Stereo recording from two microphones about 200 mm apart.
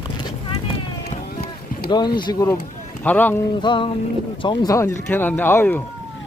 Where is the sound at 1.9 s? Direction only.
20° left (ahead or behind).